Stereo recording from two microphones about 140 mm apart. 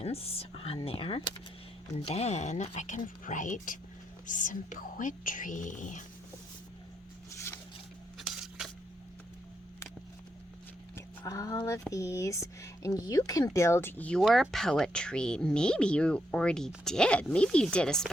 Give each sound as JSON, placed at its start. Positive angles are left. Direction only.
{"t": 0.0, "sound": "speech", "side_deg": 45}
{"t": 8.3, "sound": "a sound", "side_deg": -5}
{"t": 11.3, "sound": "speech", "side_deg": 25}
{"t": 14.2, "sound": "speech", "side_deg": 0}